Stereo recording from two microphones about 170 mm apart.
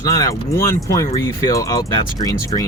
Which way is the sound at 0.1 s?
20° left (ahead or behind).